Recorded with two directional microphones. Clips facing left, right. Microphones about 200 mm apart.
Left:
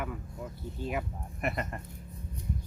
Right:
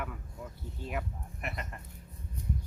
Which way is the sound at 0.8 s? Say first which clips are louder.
Left 4 dB; 5° left (ahead or behind).